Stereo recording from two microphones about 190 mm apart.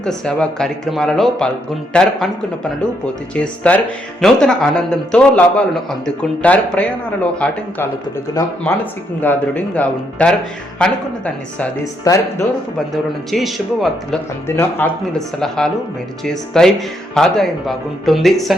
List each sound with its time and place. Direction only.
0.0 s speech: 5° left (ahead or behind)
3.3 s speech: 5° left (ahead or behind)
12.0 s speech: 15° left (ahead or behind)
12.9 s speech: centre (ahead or behind)
14.4 s speech: 10° left (ahead or behind)